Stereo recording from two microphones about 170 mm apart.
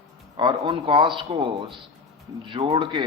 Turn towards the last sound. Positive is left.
turn(degrees=-25)  # may be behind; listen again after turning